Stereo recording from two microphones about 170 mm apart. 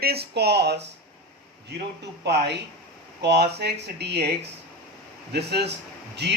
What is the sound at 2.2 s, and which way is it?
Speech, 80° right.